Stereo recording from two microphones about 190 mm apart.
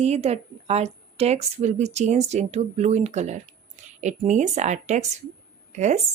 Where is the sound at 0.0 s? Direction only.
35° right (ahead or behind).